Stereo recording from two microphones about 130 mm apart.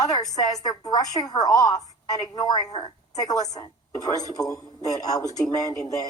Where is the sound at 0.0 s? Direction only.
30° left (ahead or behind).